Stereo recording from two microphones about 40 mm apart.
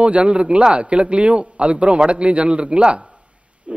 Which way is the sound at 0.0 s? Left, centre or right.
Right.